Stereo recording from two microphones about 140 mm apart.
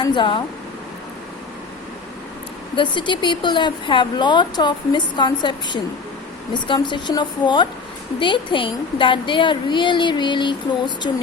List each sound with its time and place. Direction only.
0.0 s speech: 35° left (ahead or behind)
2.7 s speech: 35° left (ahead or behind)